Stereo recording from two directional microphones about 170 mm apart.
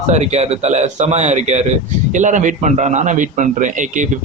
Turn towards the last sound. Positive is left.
turn(degrees=-45)  # may be behind; listen again after turning